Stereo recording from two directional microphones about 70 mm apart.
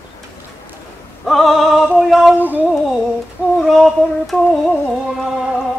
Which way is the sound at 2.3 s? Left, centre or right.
Right.